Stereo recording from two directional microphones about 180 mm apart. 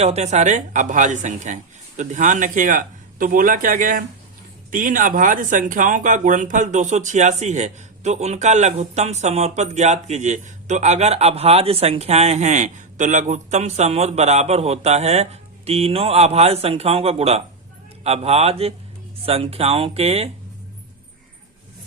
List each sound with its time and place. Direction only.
0.0 s speech: 35° right (ahead or behind)